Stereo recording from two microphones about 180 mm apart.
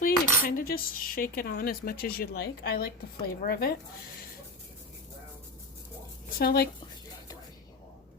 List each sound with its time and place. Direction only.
0.0 s cutlery: 55° left (ahead or behind)
6.4 s cutlery: 60° left (ahead or behind)